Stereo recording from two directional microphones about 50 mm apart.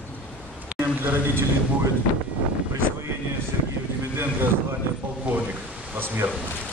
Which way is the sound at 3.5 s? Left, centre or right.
Right.